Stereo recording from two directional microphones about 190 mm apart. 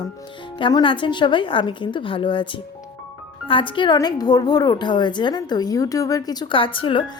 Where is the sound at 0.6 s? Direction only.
25° left (ahead or behind).